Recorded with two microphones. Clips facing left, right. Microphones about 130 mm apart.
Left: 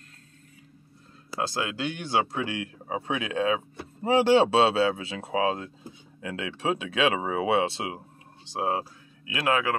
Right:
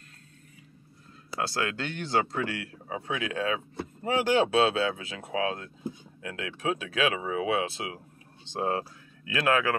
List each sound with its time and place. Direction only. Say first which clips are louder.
1.5 s speech: left 1 dB; 15° left (ahead or behind)
8.5 s speech: left 1 dB; 10° left (ahead or behind)